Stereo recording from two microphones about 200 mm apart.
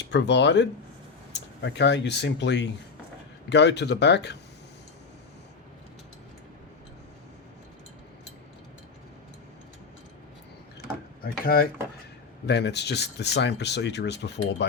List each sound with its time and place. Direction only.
0.1 s speech: 60° left (ahead or behind)
11.2 s speech: 50° left (ahead or behind)